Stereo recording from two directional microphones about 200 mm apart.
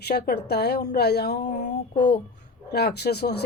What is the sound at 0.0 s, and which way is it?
A woman's voice, 55° left (ahead or behind).